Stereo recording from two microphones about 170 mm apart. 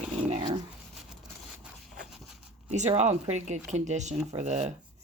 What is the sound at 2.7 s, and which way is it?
Speech, 40° right (ahead or behind).